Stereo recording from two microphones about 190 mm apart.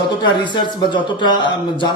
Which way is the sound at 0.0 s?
25° left (ahead or behind).